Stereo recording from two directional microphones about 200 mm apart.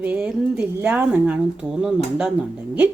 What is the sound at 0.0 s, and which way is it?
Speech, 5° right (ahead or behind).